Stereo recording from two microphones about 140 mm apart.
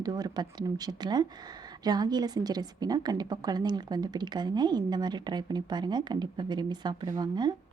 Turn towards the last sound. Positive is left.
turn(degrees=-30)  # may be behind; listen again after turning